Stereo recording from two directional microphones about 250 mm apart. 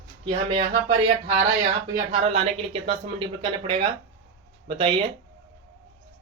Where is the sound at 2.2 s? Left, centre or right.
Right.